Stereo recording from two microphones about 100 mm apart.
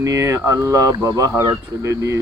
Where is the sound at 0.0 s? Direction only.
30° right (ahead or behind).